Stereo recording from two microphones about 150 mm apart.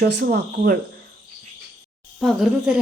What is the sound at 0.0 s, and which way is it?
Speech, 90° right.